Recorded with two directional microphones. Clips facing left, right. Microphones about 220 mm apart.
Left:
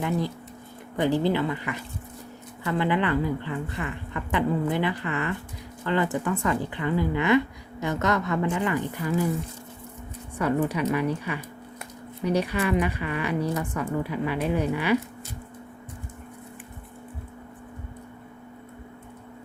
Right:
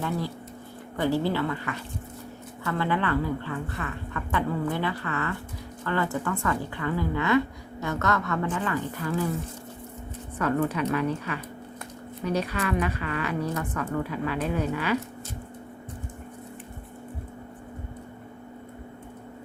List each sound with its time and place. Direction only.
0.9 s a woman's voice: 15° left (ahead or behind)
10.3 s a woman's voice: 10° left (ahead or behind)